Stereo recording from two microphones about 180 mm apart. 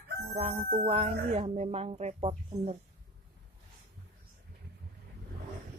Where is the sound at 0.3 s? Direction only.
35° right (ahead or behind).